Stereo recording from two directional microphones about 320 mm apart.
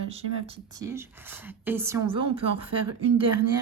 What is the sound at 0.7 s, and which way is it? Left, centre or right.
A woman's voice, centre.